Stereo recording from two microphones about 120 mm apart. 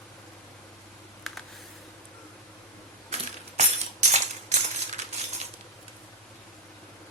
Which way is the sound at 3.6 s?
75° right (ahead or behind).